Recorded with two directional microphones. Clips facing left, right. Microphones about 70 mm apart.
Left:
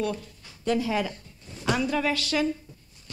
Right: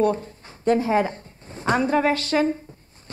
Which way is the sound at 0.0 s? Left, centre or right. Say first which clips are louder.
Right 9 dB; right.